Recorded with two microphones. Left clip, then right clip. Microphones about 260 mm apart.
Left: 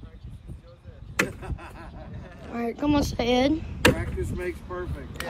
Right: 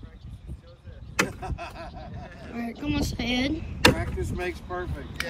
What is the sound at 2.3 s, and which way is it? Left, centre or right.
Speech, centre.